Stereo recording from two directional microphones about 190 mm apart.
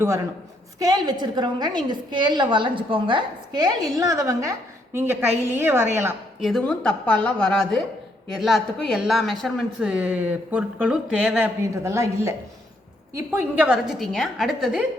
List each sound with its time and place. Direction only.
0.8 s a woman's voice: 20° right (ahead or behind)
6.4 s speech: 5° left (ahead or behind)